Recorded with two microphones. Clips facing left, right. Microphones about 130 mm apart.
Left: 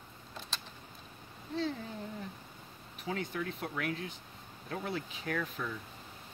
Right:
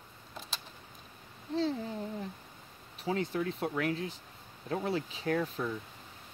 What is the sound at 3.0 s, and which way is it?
Speech, 30° right (ahead or behind).